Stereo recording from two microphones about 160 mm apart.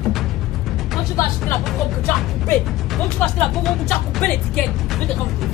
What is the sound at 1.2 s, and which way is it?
Speech, 20° left (ahead or behind).